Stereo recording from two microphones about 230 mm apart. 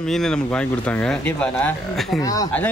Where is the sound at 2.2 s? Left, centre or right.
Centre.